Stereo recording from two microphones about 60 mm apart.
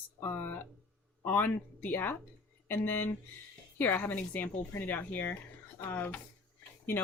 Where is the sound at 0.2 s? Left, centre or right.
Left.